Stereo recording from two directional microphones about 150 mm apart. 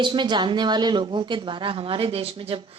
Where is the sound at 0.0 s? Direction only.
30° right (ahead or behind).